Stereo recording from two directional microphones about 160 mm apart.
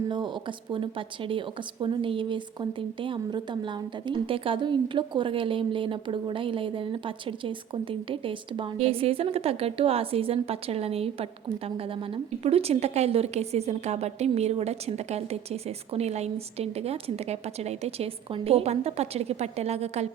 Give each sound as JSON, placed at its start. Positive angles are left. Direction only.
{"t": 0.1, "sound": "a woman's voice", "side_deg": -30}